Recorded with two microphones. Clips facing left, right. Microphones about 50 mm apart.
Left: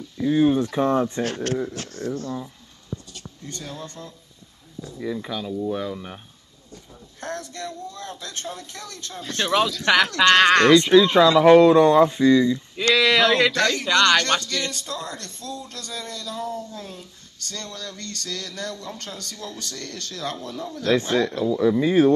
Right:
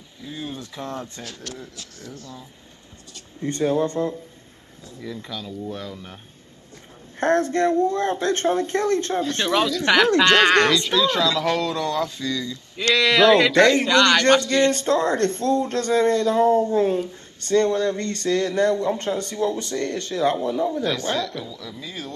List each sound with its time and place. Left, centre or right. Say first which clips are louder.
0.2 s speech: left 15 dB; left
1.2 s speech: left 11 dB; left
3.4 s speech: right 15 dB; right
5.0 s speech: left 4 dB; centre
7.2 s speech: right 13 dB; right
9.5 s speech: left 1 dB; centre
10.7 s speech: left 6 dB; left
12.7 s speech: right 1 dB; centre
13.5 s a man's voice: right 7 dB; right
13.8 s speech: right 1 dB; centre
14.4 s a man's voice: right 10 dB; right
21.5 s speech: left 17 dB; left